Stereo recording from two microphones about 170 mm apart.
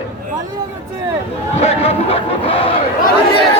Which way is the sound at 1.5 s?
35° left (ahead or behind).